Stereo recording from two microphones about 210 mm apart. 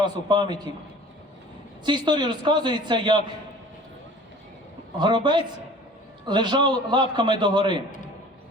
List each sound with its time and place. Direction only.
0.0 s a man's voice: 20° right (ahead or behind)
1.8 s a man's voice: 20° right (ahead or behind)
4.9 s a man's voice: 20° right (ahead or behind)
7.9 s a sound: 40° left (ahead or behind)